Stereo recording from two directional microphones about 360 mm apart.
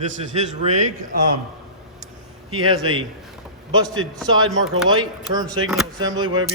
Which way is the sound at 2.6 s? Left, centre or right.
Centre.